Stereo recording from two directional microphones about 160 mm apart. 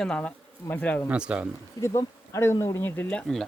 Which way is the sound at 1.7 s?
20° left (ahead or behind).